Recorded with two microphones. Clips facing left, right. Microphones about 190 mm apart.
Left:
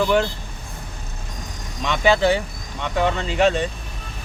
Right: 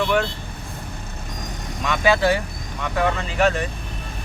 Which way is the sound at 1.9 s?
25° left (ahead or behind).